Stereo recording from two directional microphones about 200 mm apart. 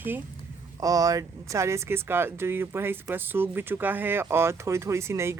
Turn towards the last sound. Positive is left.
turn(degrees=-15)  # may be behind; listen again after turning